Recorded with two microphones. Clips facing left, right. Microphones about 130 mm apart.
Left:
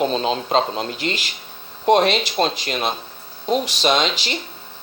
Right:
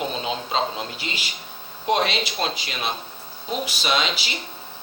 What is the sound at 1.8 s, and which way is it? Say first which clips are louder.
A man's voice: left 6 dB; 50° left (ahead or behind).